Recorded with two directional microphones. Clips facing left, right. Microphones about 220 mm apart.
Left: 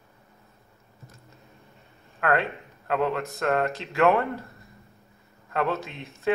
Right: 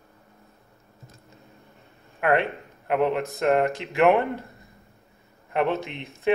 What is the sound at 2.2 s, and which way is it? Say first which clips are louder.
Speech: right 3 dB; 20° right (ahead or behind).